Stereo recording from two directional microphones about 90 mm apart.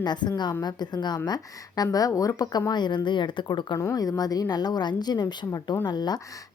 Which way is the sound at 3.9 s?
45° left (ahead or behind).